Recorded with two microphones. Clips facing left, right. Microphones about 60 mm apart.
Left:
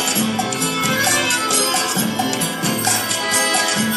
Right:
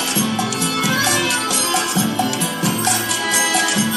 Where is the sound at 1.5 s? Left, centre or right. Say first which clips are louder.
Even; left.